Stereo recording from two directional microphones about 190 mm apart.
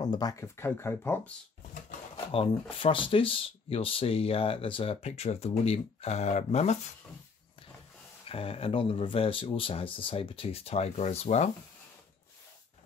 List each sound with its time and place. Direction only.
0.0 s speech: 20° left (ahead or behind)
2.1 s speech: 30° left (ahead or behind)
8.3 s speech: 30° left (ahead or behind)